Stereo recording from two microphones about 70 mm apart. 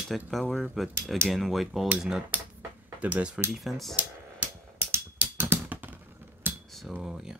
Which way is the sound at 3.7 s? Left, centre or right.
Centre.